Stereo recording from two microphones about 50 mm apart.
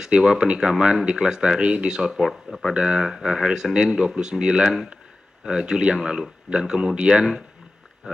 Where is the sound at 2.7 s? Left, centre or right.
Centre.